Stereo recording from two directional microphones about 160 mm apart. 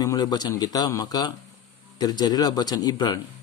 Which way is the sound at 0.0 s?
25° left (ahead or behind).